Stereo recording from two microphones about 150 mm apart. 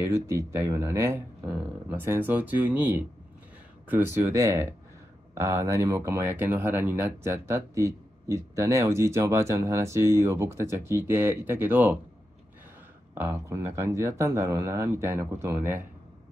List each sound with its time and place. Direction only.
0.0 s speech: 20° right (ahead or behind)
3.9 s speech: 15° right (ahead or behind)
13.1 s speech: 15° right (ahead or behind)